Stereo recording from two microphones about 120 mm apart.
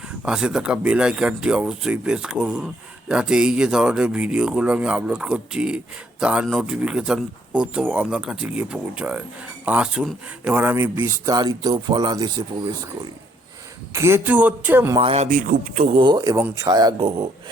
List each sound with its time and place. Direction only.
0.3 s speech: 5° right (ahead or behind); by 11.3 s 25° right (ahead or behind)
11.3 s speech: 35° right (ahead or behind)
13.9 s speech: 20° right (ahead or behind)
14.9 s speech: 55° right (ahead or behind); by 16.0 s 80° right
16.0 s speech: 35° right (ahead or behind)